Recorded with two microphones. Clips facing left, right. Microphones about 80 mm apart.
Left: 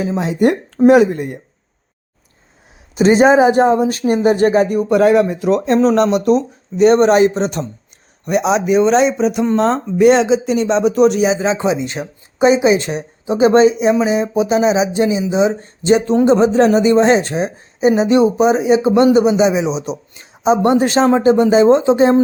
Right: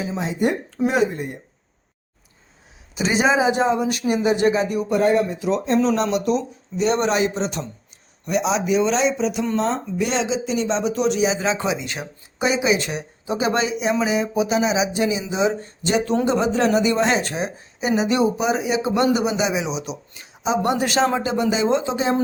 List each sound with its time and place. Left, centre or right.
0.0 s speech: left
0.3 s speech: left
0.8 s a woman's voice: left
2.9 s speech: left
3.8 s speech: left
4.9 s speech: left
9.6 s speech: left
11.3 s a woman's voice: left